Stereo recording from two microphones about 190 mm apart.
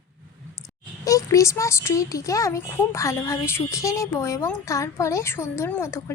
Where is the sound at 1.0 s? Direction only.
15° left (ahead or behind).